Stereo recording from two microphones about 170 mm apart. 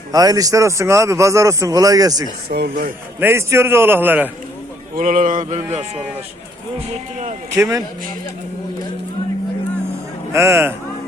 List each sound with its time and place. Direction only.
0.1 s a man's voice: 20° right (ahead or behind)
2.5 s speech: 60° right (ahead or behind)
3.2 s a man's voice: 15° right (ahead or behind)
4.9 s speech: 50° right (ahead or behind)
7.5 s a man's voice: 15° right (ahead or behind)
10.3 s a man's voice: 15° right (ahead or behind)